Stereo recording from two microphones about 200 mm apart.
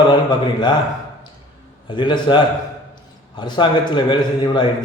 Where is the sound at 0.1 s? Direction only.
20° left (ahead or behind).